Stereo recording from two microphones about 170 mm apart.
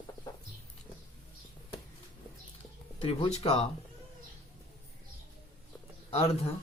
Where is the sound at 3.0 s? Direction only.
30° left (ahead or behind).